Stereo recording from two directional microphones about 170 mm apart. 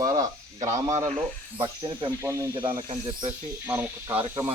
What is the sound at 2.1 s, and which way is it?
Speech, 15° right (ahead or behind).